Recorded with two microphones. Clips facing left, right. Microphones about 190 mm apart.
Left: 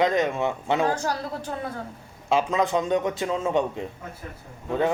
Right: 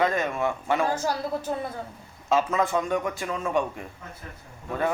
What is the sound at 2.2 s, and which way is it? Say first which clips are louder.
A man's voice: left 1 dB; 15° left (ahead or behind).